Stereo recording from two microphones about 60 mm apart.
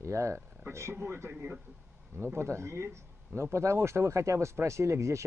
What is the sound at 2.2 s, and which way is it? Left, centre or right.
Speech, right.